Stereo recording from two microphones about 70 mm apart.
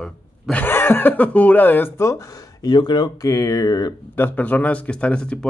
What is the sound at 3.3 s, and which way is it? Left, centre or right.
Speech, left.